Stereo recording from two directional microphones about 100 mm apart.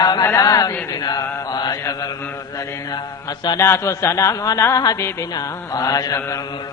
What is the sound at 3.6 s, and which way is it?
Speech, 30° left (ahead or behind).